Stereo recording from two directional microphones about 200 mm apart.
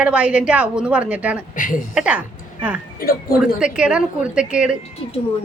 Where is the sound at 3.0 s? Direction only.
50° left (ahead or behind).